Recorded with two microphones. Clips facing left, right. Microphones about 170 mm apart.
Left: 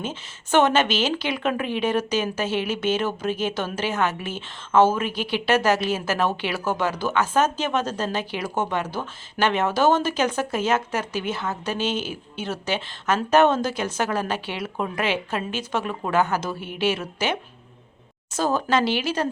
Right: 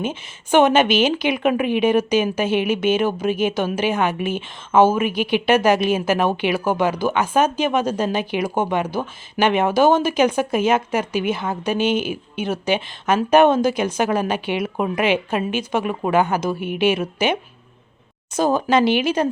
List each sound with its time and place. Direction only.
0.0 s speech: 15° right (ahead or behind)
18.3 s speech: 15° right (ahead or behind)